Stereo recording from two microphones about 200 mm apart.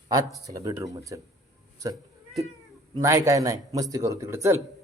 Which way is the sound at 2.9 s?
15° right (ahead or behind).